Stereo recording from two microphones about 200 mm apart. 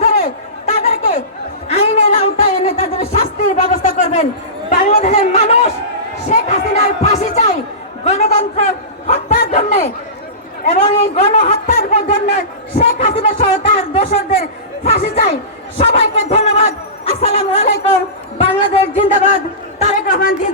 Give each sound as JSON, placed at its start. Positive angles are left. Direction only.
{"t": 0.0, "sound": "a sound", "side_deg": 30}
{"t": 4.7, "sound": "speech", "side_deg": 35}
{"t": 6.2, "sound": "music", "side_deg": 35}
{"t": 8.0, "sound": "a man's voice", "side_deg": 35}
{"t": 19.8, "sound": "chatter", "side_deg": 40}